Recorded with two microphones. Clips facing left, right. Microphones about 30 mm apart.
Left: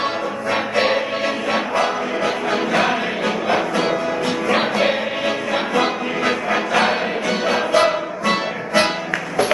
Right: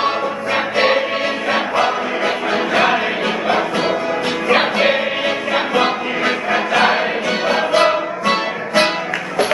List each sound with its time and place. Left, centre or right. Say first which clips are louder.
0.0 s music: right 3 dB; centre